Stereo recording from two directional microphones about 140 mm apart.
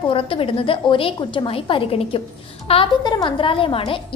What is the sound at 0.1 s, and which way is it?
A woman's voice, 40° left (ahead or behind).